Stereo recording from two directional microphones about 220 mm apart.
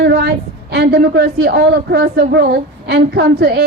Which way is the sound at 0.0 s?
45° right (ahead or behind).